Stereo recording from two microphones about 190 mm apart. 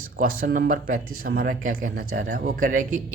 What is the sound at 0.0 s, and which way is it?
A man's voice, 50° right (ahead or behind).